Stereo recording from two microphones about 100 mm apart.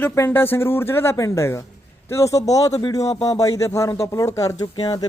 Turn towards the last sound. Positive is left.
turn(degrees=45)  # may be behind; listen again after turning